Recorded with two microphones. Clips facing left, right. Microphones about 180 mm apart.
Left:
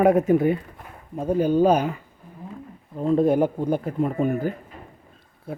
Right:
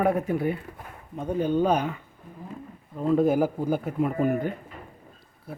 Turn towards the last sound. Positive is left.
turn(degrees=0)  # may be behind; listen again after turning